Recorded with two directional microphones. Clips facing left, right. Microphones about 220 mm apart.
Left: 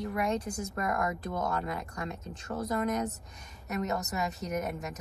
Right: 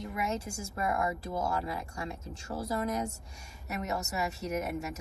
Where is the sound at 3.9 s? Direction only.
30° right (ahead or behind).